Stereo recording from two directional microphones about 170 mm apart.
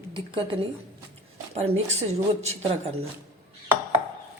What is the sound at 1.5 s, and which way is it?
Speech, 35° right (ahead or behind).